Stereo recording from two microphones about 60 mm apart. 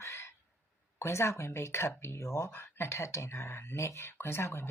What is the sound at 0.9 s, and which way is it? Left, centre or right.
Speech, left.